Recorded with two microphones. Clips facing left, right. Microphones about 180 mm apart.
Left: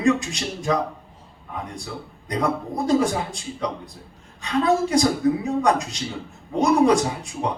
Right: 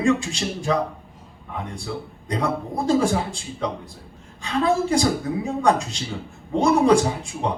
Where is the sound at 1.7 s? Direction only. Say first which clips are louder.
Right 3 dB; 30° right (ahead or behind).